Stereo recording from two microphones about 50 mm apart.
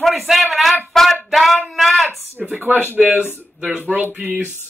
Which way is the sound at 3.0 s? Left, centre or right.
Right.